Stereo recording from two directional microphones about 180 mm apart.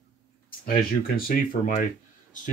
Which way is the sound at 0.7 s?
55° left (ahead or behind).